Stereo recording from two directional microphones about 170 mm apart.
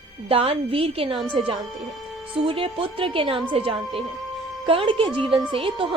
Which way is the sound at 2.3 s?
30° right (ahead or behind).